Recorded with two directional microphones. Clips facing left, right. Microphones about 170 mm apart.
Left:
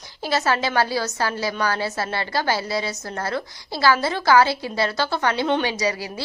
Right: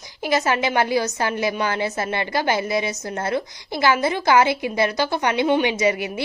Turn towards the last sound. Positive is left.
turn(degrees=-20)  # may be behind; listen again after turning